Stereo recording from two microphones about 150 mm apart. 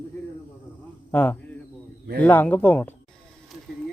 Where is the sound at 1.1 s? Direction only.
10° left (ahead or behind).